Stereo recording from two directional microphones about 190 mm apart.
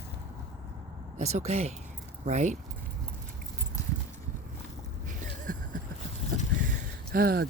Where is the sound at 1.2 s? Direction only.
35° right (ahead or behind).